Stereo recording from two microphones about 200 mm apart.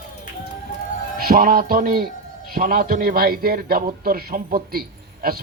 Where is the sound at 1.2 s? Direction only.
45° right (ahead or behind).